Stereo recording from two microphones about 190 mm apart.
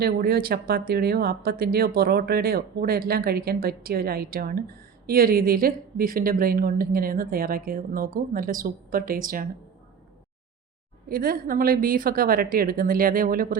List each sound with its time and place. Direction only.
0.0 s speech: 55° right (ahead or behind)
11.1 s speech: 50° right (ahead or behind)